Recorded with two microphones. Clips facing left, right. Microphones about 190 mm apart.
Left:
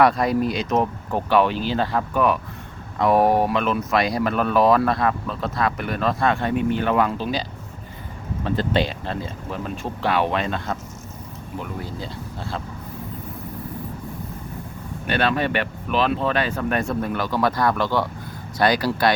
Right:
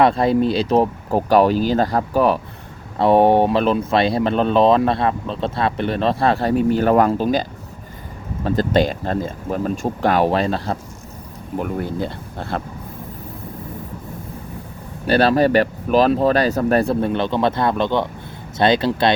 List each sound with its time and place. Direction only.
0.0 s speech: 25° right (ahead or behind); by 7.4 s 45° right (ahead or behind)
8.4 s speech: 40° right (ahead or behind)
11.5 s speech: 55° right (ahead or behind)
15.0 s speech: 35° right (ahead or behind)